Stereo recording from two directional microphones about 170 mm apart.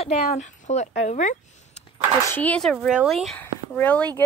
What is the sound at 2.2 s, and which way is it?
Speech, 10° left (ahead or behind).